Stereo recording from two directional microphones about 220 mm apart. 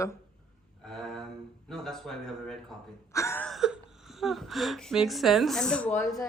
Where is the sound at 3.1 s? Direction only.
15° left (ahead or behind).